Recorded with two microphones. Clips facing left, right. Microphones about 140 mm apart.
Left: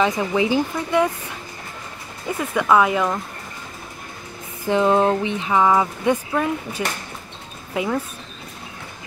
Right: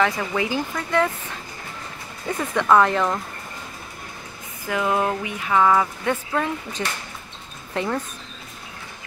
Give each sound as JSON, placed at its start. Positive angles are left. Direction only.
{"t": 0.0, "sound": "speech", "side_deg": 20}
{"t": 4.6, "sound": "speech", "side_deg": 25}